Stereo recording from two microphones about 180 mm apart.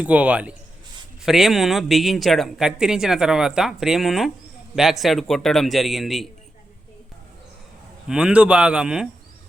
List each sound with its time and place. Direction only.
0.0 s a man's voice: 10° right (ahead or behind)
8.0 s speech: 5° right (ahead or behind)